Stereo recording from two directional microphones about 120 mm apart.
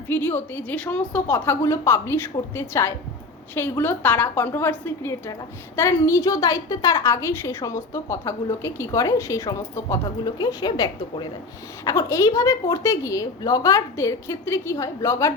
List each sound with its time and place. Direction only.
0.1 s a woman's voice: 15° left (ahead or behind)